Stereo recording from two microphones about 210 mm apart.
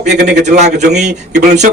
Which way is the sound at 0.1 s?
50° right (ahead or behind).